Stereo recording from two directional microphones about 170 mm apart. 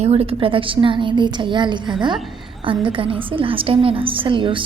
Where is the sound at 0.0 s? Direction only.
35° right (ahead or behind).